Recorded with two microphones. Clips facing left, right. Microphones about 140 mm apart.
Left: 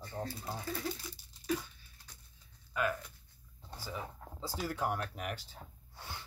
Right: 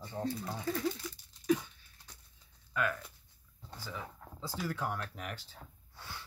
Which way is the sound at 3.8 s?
10° left (ahead or behind).